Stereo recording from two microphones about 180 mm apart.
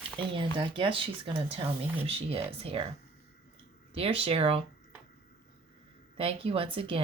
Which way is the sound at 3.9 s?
30° right (ahead or behind).